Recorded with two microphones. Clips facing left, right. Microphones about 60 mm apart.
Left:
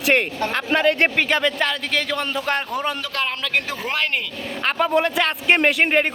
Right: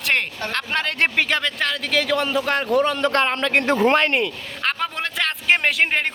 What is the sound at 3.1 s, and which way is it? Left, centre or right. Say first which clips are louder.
Speech: right 6 dB; right.